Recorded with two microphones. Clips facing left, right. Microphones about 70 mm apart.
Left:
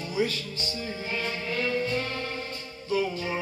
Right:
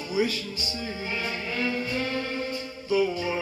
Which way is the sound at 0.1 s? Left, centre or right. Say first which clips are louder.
Right 2 dB; centre.